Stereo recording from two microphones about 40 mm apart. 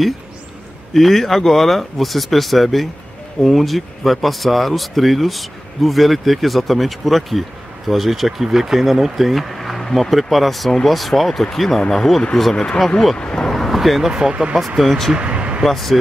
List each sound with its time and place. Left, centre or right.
0.9 s speech: centre
13.2 s speech: left
13.5 s a sound: centre
14.3 s speech: right
14.8 s speech: centre
15.1 s a sound: right
15.6 s speech: centre